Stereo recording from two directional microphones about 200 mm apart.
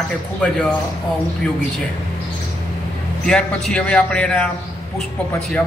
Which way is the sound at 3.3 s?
5° left (ahead or behind).